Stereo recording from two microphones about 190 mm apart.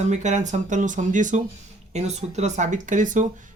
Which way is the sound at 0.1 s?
40° right (ahead or behind).